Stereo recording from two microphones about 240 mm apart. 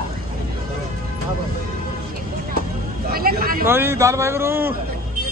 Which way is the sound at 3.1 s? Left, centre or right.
Right.